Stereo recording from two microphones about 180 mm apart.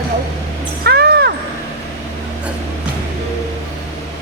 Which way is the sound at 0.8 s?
65° right (ahead or behind).